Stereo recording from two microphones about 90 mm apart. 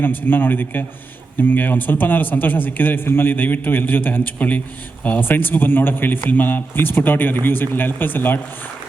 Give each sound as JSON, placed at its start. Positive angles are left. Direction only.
{"t": 0.0, "sound": "a man's voice", "side_deg": 20}